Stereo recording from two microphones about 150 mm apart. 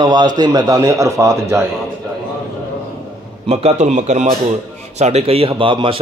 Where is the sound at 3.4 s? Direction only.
50° right (ahead or behind).